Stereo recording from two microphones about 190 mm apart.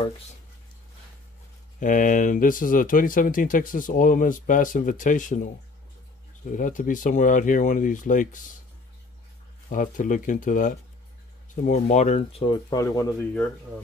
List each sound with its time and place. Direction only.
1.8 s speech: 45° left (ahead or behind)
9.7 s speech: 45° left (ahead or behind); by 13.3 s 20° left (ahead or behind)